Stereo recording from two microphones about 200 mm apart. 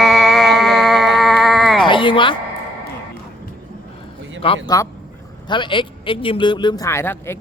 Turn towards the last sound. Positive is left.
turn(degrees=10)  # may be behind; listen again after turning